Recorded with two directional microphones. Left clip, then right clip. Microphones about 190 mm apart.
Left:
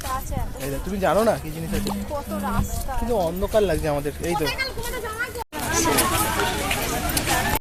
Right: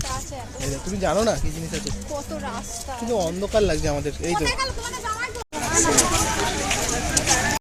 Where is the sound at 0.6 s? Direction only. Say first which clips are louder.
Left 2 dB; 15° left (ahead or behind).